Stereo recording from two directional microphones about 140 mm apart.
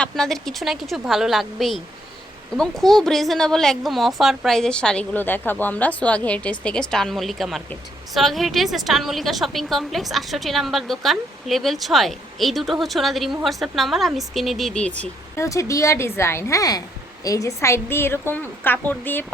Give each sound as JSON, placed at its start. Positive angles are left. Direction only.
{"t": 0.0, "sound": "a woman's voice", "side_deg": 5}
{"t": 15.4, "sound": "a woman's voice", "side_deg": 20}